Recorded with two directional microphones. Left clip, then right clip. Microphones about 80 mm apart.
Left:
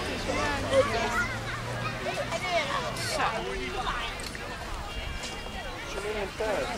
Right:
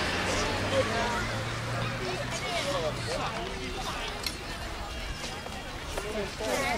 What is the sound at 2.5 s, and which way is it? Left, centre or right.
Vehicle, left.